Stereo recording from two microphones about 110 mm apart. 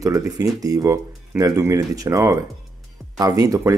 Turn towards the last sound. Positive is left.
turn(degrees=-30)  # may be behind; listen again after turning